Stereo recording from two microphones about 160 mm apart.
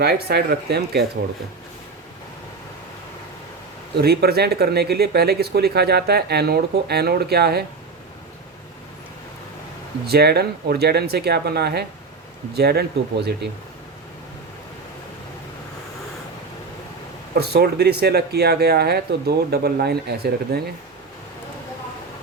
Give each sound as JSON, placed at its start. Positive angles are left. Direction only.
{"t": 0.0, "sound": "speech", "side_deg": -90}
{"t": 3.9, "sound": "speech", "side_deg": -80}
{"t": 10.1, "sound": "speech", "side_deg": -90}
{"t": 17.3, "sound": "speech", "side_deg": -80}